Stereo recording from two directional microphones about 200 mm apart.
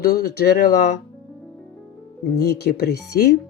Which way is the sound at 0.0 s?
50° left (ahead or behind).